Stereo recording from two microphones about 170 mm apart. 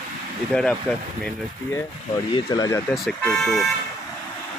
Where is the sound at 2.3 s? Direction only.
25° left (ahead or behind).